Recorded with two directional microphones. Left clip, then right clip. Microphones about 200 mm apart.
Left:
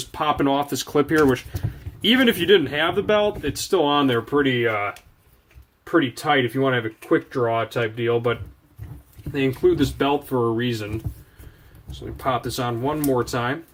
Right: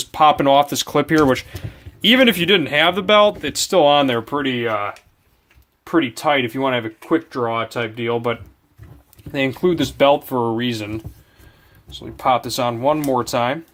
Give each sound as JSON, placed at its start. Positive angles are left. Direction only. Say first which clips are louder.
{"t": 0.1, "sound": "speech", "louder": "right 8 dB", "side_deg": -50}
{"t": 12.1, "sound": "speech", "louder": "right 6 dB", "side_deg": -50}